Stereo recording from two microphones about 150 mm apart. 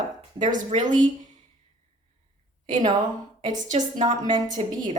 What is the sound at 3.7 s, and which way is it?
A woman's voice, 55° right (ahead or behind).